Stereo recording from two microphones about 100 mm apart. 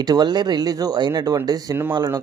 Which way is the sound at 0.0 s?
40° right (ahead or behind).